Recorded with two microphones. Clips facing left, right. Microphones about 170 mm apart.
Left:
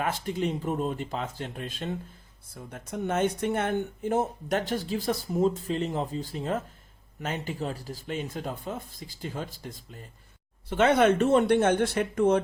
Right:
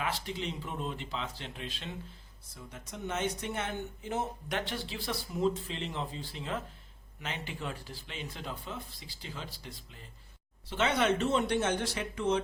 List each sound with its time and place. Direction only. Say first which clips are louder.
0.0 s speech: left 7 dB; 50° left (ahead or behind)